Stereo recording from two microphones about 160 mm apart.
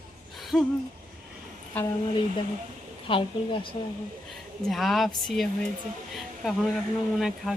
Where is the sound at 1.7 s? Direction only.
10° left (ahead or behind).